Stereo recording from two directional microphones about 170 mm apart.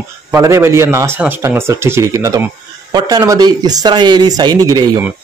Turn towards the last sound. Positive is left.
turn(degrees=-25)  # may be behind; listen again after turning